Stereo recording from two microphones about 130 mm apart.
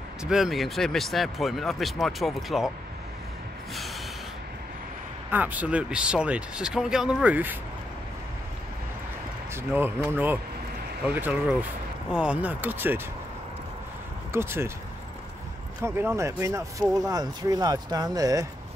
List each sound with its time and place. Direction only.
0.2 s speech: 5° right (ahead or behind)
5.3 s speech: 10° right (ahead or behind)
9.5 s speech: 20° right (ahead or behind)
14.3 s speech: 20° right (ahead or behind)
15.8 s speech: 20° right (ahead or behind)